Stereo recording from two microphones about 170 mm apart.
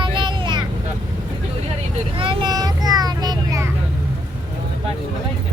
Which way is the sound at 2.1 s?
30° right (ahead or behind).